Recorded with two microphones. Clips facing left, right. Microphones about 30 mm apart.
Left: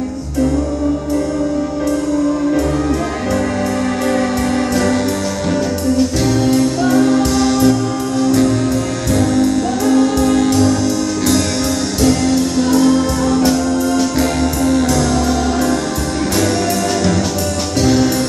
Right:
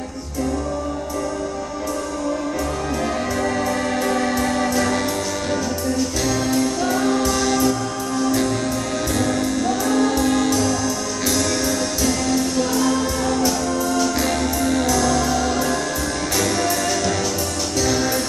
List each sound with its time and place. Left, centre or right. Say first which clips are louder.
4.1 s music: left 4 dB; centre
5.9 s music: left 8 dB; left
7.0 s music: left 7 dB; centre
7.3 s music: left 6 dB; left
9.2 s music: left 8 dB; left
10.2 s music: left 5 dB; centre
10.5 s music: left 6 dB; left
12.1 s music: left 6 dB; left
14.6 s music: left 7 dB; centre
14.9 s music: left 3 dB; left
17.8 s music: left 8 dB; left